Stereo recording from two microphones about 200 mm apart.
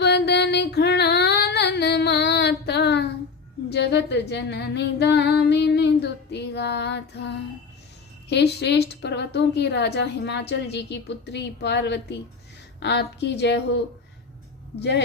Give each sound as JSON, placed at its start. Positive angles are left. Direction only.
{"t": 0.0, "sound": "female singing", "side_deg": 55}
{"t": 8.3, "sound": "female singing", "side_deg": 60}
{"t": 14.8, "sound": "female singing", "side_deg": 55}